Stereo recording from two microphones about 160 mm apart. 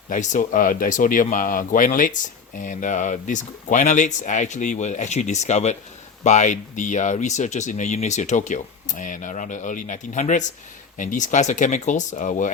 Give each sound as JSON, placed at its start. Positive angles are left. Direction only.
{"t": 0.1, "sound": "speech", "side_deg": 50}